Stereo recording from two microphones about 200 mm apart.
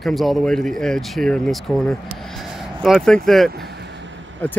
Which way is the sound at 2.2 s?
Centre (ahead or behind).